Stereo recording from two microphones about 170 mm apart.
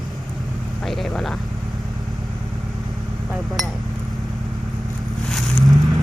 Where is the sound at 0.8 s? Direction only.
Centre (ahead or behind).